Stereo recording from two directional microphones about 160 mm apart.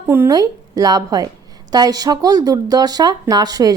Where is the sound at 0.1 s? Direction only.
20° right (ahead or behind).